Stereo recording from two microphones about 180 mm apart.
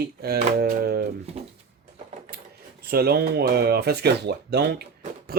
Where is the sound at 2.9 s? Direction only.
60° right (ahead or behind).